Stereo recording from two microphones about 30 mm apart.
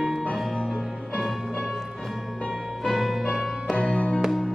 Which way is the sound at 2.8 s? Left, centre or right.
Centre.